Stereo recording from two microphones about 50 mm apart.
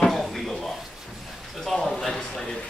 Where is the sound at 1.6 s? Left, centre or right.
Centre.